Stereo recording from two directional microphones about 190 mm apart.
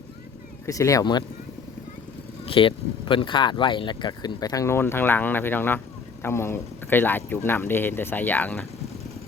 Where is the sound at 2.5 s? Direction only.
25° left (ahead or behind); by 8.6 s 10° left (ahead or behind).